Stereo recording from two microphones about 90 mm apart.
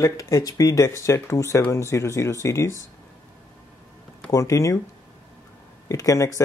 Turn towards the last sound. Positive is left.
turn(degrees=35)  # may be behind; listen again after turning